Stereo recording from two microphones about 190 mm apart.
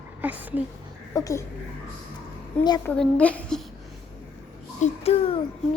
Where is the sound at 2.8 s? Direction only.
5° left (ahead or behind).